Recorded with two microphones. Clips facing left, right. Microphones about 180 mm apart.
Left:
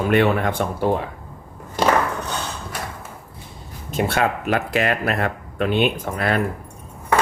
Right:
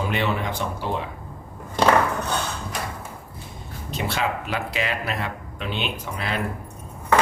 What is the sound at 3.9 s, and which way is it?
Speech, 50° left (ahead or behind).